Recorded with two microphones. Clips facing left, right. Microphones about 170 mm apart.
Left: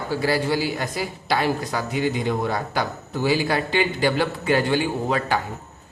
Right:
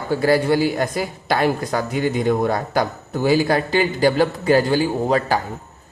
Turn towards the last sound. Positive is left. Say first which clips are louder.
# right 4 dB
turn(degrees=-40)  # may be behind; listen again after turning